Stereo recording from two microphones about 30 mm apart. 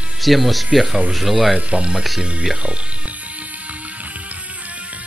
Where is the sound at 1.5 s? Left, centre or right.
Right.